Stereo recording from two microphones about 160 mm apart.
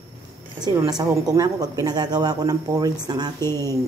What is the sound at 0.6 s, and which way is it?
Speech, 25° right (ahead or behind).